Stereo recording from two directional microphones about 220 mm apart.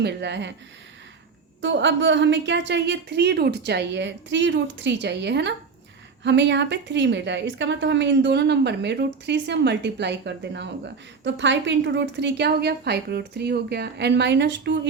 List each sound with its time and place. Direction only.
0.0 s a woman's voice: 50° right (ahead or behind)
1.6 s a woman's voice: 55° right (ahead or behind)